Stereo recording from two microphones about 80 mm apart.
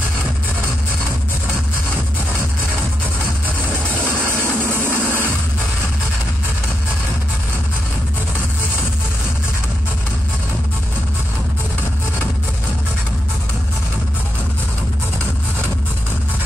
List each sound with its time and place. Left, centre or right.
4.8 s music: right